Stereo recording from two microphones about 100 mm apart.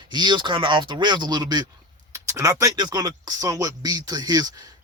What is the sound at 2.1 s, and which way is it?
Speech, 30° right (ahead or behind).